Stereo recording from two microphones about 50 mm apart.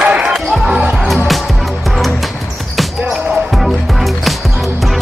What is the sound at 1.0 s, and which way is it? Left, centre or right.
Music, centre.